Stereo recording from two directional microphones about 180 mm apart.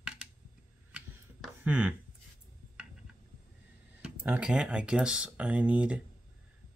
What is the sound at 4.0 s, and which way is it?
Speech, 5° right (ahead or behind).